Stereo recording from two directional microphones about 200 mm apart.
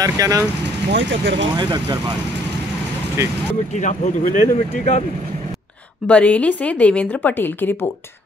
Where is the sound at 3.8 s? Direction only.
35° left (ahead or behind).